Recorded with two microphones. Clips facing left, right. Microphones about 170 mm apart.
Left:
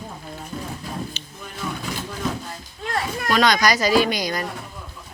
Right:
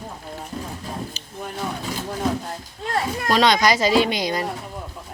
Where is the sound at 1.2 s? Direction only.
40° right (ahead or behind).